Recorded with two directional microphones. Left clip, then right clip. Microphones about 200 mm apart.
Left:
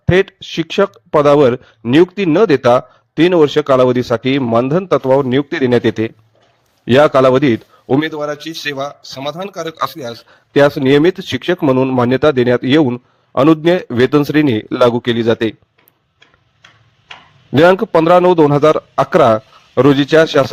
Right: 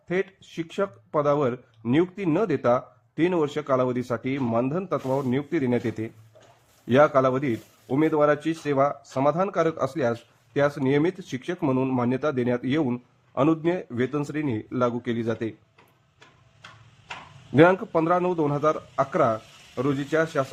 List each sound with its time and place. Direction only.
0.1 s a man's voice: 40° left (ahead or behind)
8.1 s speech: centre (ahead or behind)
9.0 s speech: 40° left (ahead or behind)
9.2 s speech: centre (ahead or behind)
10.5 s speech: 35° left (ahead or behind)
17.5 s speech: 45° left (ahead or behind)